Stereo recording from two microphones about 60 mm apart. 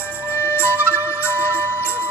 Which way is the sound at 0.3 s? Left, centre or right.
Left.